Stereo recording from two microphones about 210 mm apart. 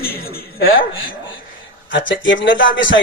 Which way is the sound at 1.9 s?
65° left (ahead or behind).